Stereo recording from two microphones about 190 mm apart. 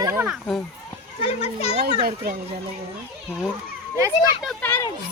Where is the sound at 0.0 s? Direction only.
10° right (ahead or behind).